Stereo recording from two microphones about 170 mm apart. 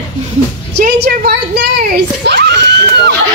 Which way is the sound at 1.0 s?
70° right (ahead or behind).